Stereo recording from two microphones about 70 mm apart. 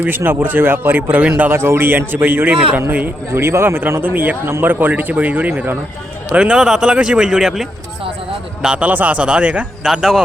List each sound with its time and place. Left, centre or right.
0.3 s a man's voice: right
1.5 s a man's voice: right
3.3 s a man's voice: right
6.3 s speech: centre
8.6 s a man's voice: centre
9.8 s speech: centre